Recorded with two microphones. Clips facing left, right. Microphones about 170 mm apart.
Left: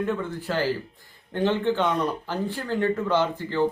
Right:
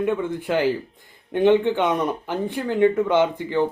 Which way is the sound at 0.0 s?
15° right (ahead or behind).